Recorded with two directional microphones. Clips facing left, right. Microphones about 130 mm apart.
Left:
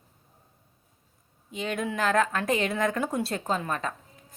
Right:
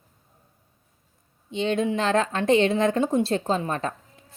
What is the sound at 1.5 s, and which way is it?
A woman's voice, 25° right (ahead or behind).